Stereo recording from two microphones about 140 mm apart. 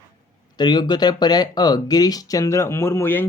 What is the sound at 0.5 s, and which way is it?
Speech, 30° left (ahead or behind).